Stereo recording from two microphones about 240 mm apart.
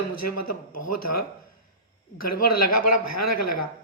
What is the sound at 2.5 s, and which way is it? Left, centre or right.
Speech, left.